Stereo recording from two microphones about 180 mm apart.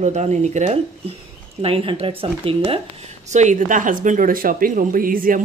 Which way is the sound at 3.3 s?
40° right (ahead or behind).